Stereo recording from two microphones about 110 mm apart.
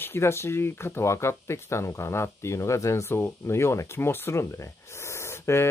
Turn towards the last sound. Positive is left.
turn(degrees=25)  # may be behind; listen again after turning